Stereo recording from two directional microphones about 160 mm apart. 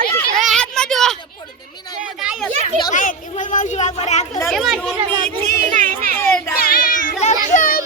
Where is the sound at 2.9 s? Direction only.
55° left (ahead or behind).